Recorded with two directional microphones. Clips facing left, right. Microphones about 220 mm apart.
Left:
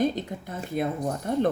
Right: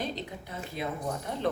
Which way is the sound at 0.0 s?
50° left (ahead or behind).